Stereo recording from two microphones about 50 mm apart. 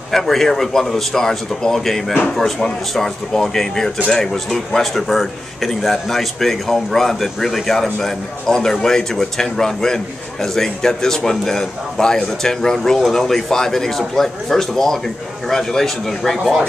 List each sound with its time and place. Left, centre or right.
0.1 s a man's voice: centre